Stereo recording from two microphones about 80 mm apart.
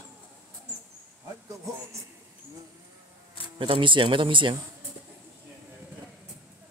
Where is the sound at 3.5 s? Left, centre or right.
Right.